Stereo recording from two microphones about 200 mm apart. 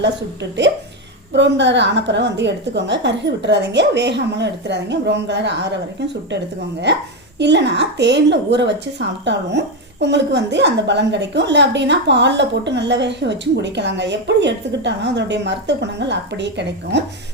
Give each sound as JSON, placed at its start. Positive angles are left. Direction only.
{"t": 1.3, "sound": "a woman's voice", "side_deg": -60}
{"t": 6.9, "sound": "a woman's voice", "side_deg": -60}